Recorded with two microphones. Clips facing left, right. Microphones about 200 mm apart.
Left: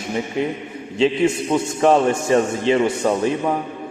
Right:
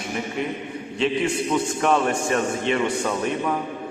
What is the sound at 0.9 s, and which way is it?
A man's voice, 25° left (ahead or behind).